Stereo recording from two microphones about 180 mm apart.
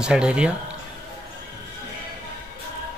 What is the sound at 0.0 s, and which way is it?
Speech, 5° right (ahead or behind).